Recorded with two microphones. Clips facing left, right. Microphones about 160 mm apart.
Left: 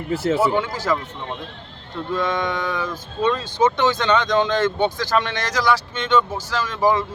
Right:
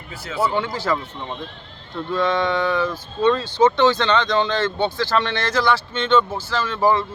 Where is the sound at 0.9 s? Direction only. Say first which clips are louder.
Left 1 dB; 10° left (ahead or behind).